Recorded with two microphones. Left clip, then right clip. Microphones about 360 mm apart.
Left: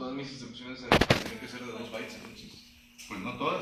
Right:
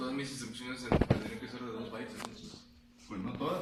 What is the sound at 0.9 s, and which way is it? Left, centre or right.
Fireworks, left.